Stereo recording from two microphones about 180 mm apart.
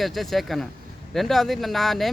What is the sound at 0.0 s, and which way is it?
Speech, centre (ahead or behind).